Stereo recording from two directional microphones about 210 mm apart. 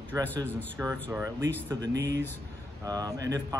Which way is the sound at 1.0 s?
10° right (ahead or behind).